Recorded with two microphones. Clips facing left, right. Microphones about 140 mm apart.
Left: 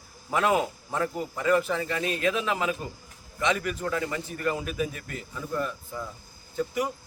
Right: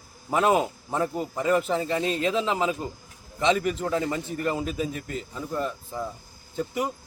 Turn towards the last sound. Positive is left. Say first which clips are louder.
# even
turn(degrees=-25)  # may be behind; listen again after turning